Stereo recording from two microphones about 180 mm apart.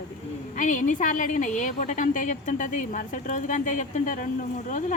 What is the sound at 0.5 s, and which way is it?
Speech, 45° left (ahead or behind).